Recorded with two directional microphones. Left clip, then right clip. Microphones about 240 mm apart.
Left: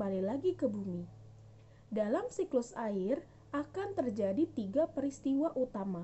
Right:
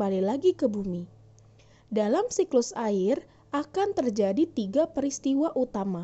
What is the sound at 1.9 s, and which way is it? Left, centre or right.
A woman's voice, right.